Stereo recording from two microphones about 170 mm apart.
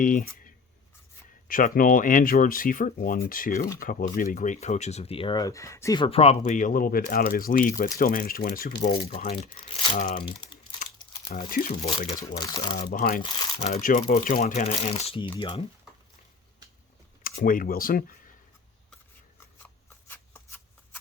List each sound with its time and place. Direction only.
0.0 s speech: 50° left (ahead or behind)
1.5 s speech: 55° left (ahead or behind); by 6.0 s 15° left (ahead or behind)
6.0 s speech: 35° left (ahead or behind)
6.4 s speech: 50° left (ahead or behind); by 9.4 s 65° left (ahead or behind)
9.4 s speech: 30° left (ahead or behind)
11.3 s speech: 55° left (ahead or behind)
11.9 s speech: 30° left (ahead or behind)
12.8 s speech: 50° left (ahead or behind)
14.4 s speech: 40° left (ahead or behind)
17.2 s speech: 55° left (ahead or behind)
20.1 s a sound: 10° left (ahead or behind)